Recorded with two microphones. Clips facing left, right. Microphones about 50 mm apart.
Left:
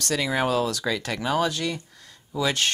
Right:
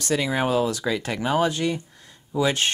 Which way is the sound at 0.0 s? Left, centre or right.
Centre.